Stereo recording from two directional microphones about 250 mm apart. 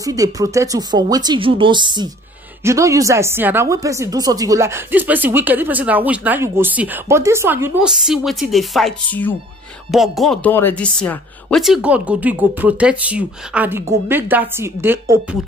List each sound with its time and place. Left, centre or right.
0.0 s a woman's voice: centre